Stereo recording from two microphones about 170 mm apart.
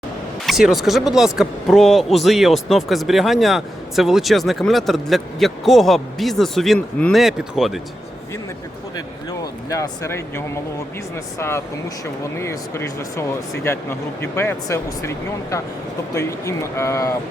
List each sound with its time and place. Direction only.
0.4 s speech: centre (ahead or behind)
9.4 s speech: 20° left (ahead or behind)